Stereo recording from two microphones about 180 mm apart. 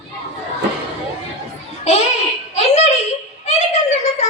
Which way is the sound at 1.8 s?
40° left (ahead or behind).